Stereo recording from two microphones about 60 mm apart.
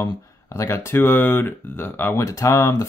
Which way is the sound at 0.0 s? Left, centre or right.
Left.